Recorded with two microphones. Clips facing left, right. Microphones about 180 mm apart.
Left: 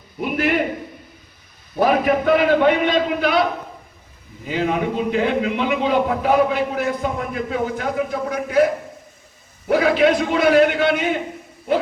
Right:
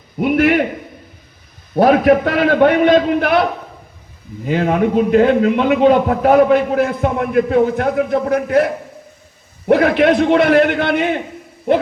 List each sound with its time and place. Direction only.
0.2 s a man's voice: 65° right (ahead or behind)
1.8 s a man's voice: 70° right (ahead or behind)
4.4 s a man's voice: 55° right (ahead or behind)
9.6 s a man's voice: 55° right (ahead or behind)